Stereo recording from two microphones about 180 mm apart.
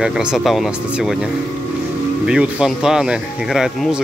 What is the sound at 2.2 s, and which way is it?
Speech, 5° right (ahead or behind).